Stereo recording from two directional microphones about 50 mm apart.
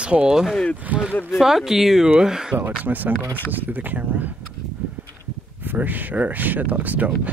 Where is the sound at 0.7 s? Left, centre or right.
Right.